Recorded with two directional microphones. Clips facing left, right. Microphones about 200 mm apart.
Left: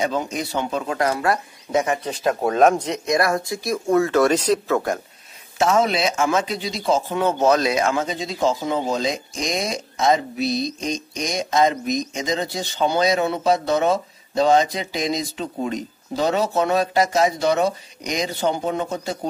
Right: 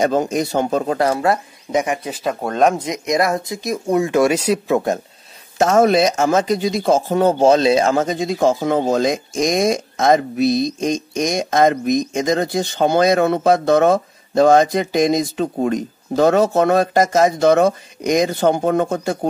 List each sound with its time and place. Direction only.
0.0 s speech: 45° right (ahead or behind); by 2.0 s 15° right (ahead or behind)
2.0 s speech: centre (ahead or behind)
2.8 s speech: 15° right (ahead or behind)
4.7 s speech: 25° right (ahead or behind)
5.6 s speech: 45° right (ahead or behind)